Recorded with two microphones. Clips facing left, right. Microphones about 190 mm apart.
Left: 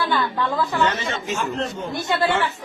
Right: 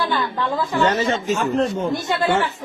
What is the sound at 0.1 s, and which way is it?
Speech, 15° right (ahead or behind).